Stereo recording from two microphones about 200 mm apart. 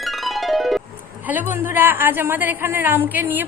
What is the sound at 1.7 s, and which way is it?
Music, 10° right (ahead or behind).